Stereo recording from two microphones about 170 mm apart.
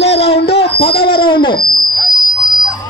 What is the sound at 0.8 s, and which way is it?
Speech, 65° left (ahead or behind).